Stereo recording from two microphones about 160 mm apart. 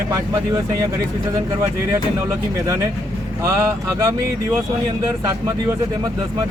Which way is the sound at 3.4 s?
20° right (ahead or behind).